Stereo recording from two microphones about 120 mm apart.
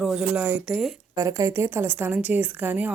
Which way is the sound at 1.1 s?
25° right (ahead or behind).